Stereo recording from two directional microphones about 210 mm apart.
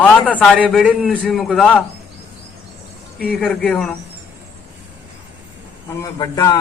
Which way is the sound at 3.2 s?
Centre (ahead or behind).